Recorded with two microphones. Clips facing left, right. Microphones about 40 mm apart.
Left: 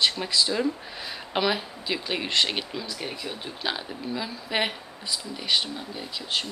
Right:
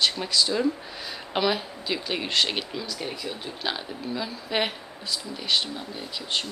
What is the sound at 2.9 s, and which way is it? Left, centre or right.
Speech, centre.